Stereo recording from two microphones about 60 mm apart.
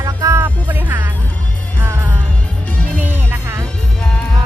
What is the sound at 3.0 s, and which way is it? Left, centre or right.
Music, right.